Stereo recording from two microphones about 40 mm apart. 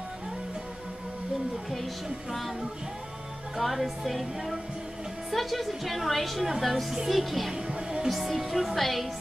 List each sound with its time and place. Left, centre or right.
3.5 s a woman's voice: centre
7.5 s music: centre
8.1 s a woman's voice: centre